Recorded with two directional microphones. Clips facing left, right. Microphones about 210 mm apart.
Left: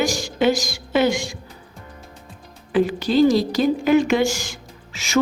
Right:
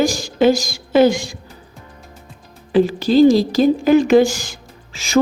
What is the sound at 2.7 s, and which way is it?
Speech, 35° right (ahead or behind).